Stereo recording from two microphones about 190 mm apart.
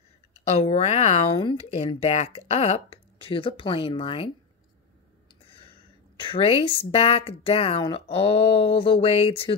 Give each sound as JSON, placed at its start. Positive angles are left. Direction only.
{"t": 0.6, "sound": "speech", "side_deg": 30}
{"t": 6.2, "sound": "speech", "side_deg": 30}